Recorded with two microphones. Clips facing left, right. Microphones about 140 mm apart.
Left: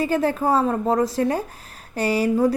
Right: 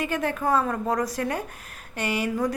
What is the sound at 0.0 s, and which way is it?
A woman's voice, 35° left (ahead or behind).